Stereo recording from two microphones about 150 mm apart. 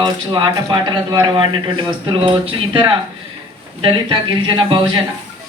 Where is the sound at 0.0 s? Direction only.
30° right (ahead or behind).